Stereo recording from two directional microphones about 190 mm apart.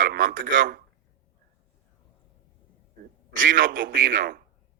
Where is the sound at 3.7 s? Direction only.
70° right (ahead or behind).